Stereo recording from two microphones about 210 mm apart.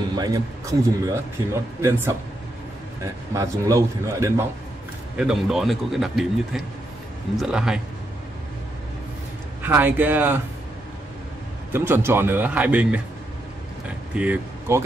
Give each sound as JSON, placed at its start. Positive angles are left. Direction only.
{"t": 0.1, "sound": "a man's voice", "side_deg": -15}
{"t": 9.6, "sound": "a man's voice", "side_deg": -10}
{"t": 11.7, "sound": "a man's voice", "side_deg": -10}
{"t": 14.1, "sound": "speech", "side_deg": -5}